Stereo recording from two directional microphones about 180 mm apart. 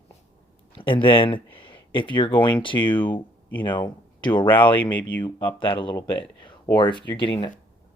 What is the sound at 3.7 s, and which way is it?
Speech, 25° left (ahead or behind).